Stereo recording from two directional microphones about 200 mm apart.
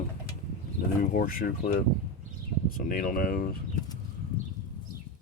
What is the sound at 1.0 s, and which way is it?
Speech, 45° left (ahead or behind).